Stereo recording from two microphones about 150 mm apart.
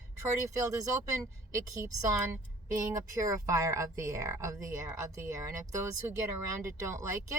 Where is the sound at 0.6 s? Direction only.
25° right (ahead or behind).